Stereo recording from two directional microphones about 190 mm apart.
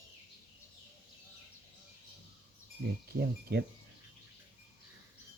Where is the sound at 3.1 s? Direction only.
55° right (ahead or behind).